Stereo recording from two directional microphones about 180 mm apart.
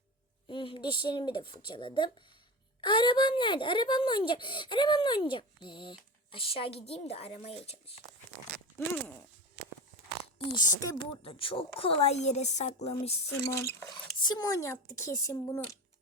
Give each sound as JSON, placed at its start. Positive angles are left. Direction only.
{"t": 0.4, "sound": "speech", "side_deg": 30}
{"t": 10.3, "sound": "a woman's voice", "side_deg": 25}
{"t": 13.5, "sound": "speech", "side_deg": 15}